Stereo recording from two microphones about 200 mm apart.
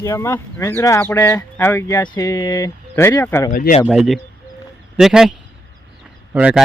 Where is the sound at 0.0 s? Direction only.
15° left (ahead or behind).